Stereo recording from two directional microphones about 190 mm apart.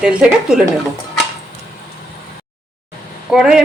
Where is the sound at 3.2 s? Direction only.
Centre (ahead or behind).